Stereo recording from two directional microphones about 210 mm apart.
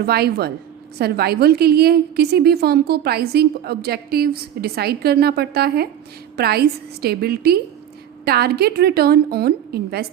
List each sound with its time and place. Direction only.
0.0 s a woman's voice: 50° right (ahead or behind)